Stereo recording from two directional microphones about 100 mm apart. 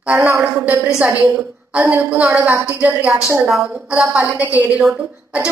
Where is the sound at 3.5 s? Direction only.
5° right (ahead or behind).